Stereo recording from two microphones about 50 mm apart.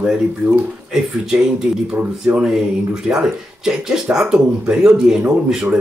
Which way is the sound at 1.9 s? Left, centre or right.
Right.